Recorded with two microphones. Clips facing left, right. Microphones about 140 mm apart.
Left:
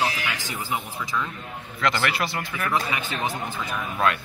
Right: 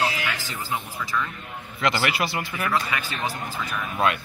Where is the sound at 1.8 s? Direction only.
5° right (ahead or behind).